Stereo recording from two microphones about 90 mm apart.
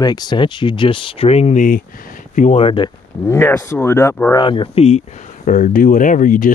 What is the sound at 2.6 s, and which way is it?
Speech, 70° left (ahead or behind).